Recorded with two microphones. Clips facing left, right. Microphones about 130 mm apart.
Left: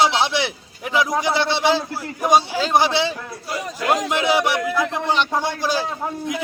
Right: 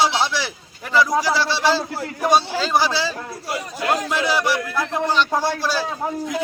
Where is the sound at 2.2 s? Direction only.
10° left (ahead or behind).